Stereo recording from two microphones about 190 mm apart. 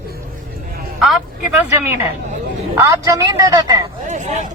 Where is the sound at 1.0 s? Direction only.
5° right (ahead or behind); by 3.8 s 20° right (ahead or behind).